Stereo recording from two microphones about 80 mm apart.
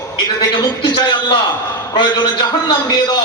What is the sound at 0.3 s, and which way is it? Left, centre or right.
A man's voice, left.